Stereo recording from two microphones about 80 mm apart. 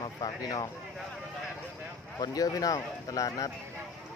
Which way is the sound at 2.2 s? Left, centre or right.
Left.